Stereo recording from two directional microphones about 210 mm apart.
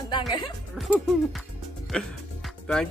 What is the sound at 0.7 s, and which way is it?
Music, centre (ahead or behind).